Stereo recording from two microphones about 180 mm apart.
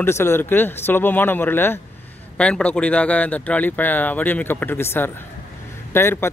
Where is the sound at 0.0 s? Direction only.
15° left (ahead or behind).